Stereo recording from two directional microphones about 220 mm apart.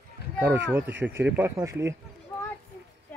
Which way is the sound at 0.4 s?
10° right (ahead or behind).